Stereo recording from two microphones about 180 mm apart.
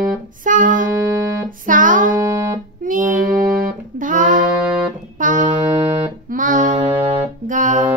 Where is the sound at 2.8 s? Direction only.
45° right (ahead or behind).